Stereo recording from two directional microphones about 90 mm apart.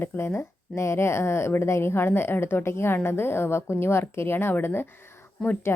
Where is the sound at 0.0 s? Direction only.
25° left (ahead or behind).